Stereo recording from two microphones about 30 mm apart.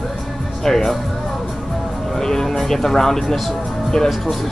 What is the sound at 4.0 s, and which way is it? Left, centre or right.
Speech, centre.